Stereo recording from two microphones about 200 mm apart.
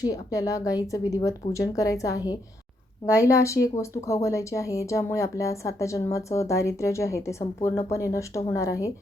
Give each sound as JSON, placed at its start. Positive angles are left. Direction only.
{"t": 0.0, "sound": "speech", "side_deg": 15}